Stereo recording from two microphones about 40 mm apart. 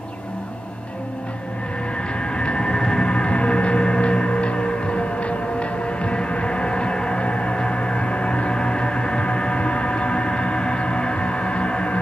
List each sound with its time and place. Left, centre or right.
2.3 s music: left